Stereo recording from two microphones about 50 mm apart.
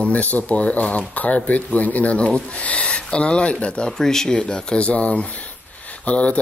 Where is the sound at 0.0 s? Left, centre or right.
Left.